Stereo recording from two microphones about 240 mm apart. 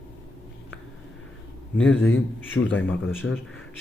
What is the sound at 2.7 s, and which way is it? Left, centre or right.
Speech, centre.